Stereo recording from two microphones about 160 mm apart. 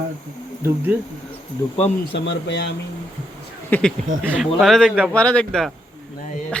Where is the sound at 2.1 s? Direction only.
90° left.